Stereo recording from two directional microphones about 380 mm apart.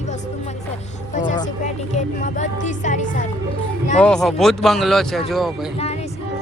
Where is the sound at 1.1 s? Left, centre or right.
Centre.